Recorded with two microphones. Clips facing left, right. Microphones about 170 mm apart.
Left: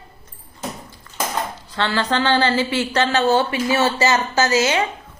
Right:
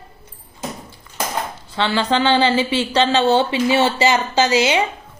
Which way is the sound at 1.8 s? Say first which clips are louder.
Right 2 dB; 20° right (ahead or behind).